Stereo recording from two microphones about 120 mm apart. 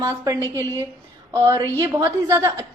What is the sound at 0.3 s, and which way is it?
Speech, 25° left (ahead or behind).